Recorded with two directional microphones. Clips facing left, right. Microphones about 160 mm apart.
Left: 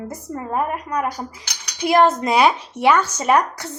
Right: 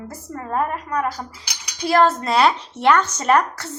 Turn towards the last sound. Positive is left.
turn(degrees=10)  # may be behind; listen again after turning